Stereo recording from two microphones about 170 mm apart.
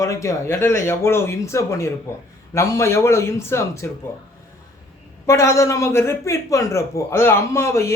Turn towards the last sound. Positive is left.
turn(degrees=15)  # may be behind; listen again after turning